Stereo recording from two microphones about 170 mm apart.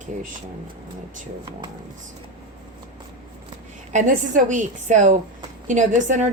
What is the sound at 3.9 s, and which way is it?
A woman's voice, 50° right (ahead or behind).